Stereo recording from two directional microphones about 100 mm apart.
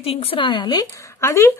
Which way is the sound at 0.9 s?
30° left (ahead or behind).